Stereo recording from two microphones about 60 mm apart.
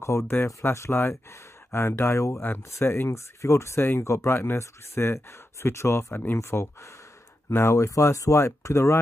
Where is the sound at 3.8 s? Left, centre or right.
Left.